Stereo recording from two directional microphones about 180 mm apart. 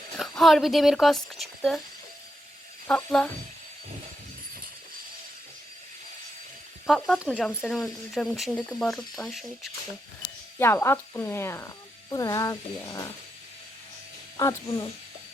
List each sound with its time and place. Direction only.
0.2 s speech: centre (ahead or behind)
2.8 s speech: 5° left (ahead or behind)
6.8 s speech: centre (ahead or behind)
10.6 s speech: 15° left (ahead or behind)
14.3 s speech: 20° left (ahead or behind)